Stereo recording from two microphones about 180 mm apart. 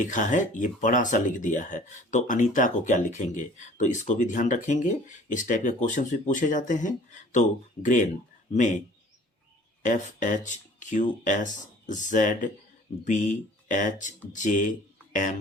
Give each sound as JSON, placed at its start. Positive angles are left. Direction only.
{"t": 0.0, "sound": "speech", "side_deg": 45}
{"t": 9.8, "sound": "speech", "side_deg": 45}